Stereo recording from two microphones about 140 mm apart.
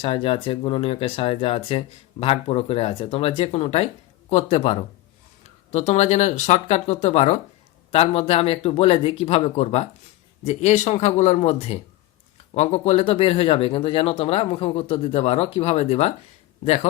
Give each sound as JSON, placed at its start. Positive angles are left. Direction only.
{"t": 0.0, "sound": "speech", "side_deg": 40}